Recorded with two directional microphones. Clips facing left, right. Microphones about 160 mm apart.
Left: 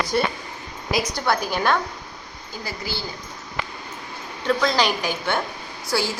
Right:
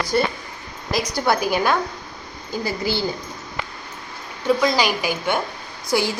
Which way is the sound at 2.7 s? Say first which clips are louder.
Right 7 dB; 20° right (ahead or behind).